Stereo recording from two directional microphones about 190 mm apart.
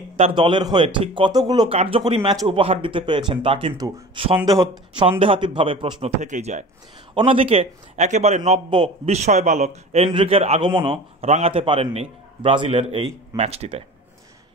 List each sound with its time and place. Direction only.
0.2 s speech: 25° right (ahead or behind)
6.2 s a man's voice: 40° right (ahead or behind)
8.5 s a man's voice: 25° right (ahead or behind)